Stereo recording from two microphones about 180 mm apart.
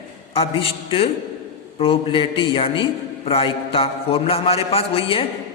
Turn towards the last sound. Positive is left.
turn(degrees=30)  # may be behind; listen again after turning